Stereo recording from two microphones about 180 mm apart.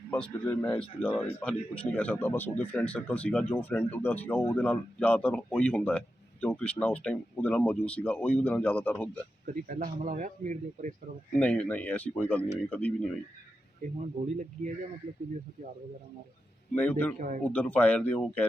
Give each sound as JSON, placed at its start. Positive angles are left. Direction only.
{"t": 0.1, "sound": "speech", "side_deg": 10}
{"t": 9.5, "sound": "speech", "side_deg": -50}
{"t": 11.3, "sound": "speech", "side_deg": 5}
{"t": 14.3, "sound": "speech", "side_deg": -40}
{"t": 16.7, "sound": "speech", "side_deg": 10}
{"t": 17.2, "sound": "speech", "side_deg": -45}
{"t": 17.4, "sound": "speech", "side_deg": 10}